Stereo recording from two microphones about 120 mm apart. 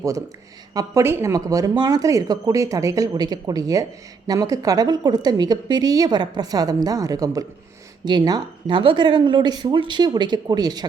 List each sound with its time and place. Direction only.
0.7 s a woman's voice: 30° right (ahead or behind)